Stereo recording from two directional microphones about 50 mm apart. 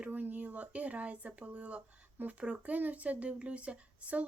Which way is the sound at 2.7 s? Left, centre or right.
Right.